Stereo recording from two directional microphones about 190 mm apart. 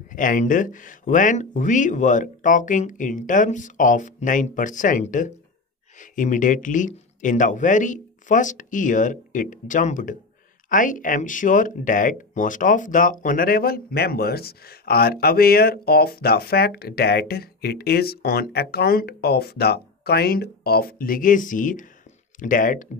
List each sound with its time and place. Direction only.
0.1 s speech: 45° left (ahead or behind)